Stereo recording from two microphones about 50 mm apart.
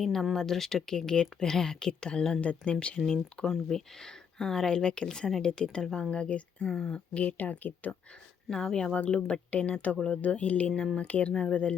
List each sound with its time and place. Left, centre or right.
0.0 s speech: centre; by 6.7 s left
6.7 s speech: centre
7.1 s speech: left
8.4 s speech: centre